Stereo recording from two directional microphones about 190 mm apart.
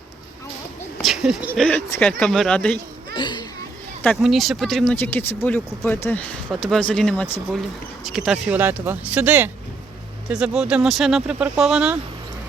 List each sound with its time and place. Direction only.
1.0 s speech: centre (ahead or behind)
3.2 s a child's voice: 25° left (ahead or behind)
4.0 s speech: centre (ahead or behind)
4.9 s speech: 10° left (ahead or behind); by 11.9 s 5° right (ahead or behind)